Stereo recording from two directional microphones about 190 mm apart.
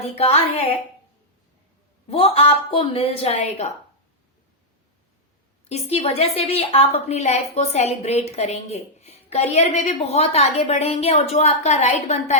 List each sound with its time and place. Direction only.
2.0 s a woman's voice: 30° left (ahead or behind)
5.6 s a woman's voice: 35° left (ahead or behind)